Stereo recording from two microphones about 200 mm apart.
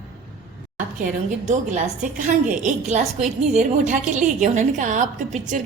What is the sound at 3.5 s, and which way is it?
Speech, 40° right (ahead or behind).